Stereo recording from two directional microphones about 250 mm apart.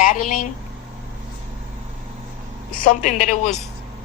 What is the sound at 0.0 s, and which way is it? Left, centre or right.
Speech, left.